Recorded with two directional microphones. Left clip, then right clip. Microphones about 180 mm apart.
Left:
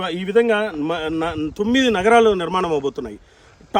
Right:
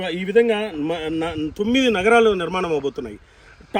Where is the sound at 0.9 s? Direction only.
40° left (ahead or behind).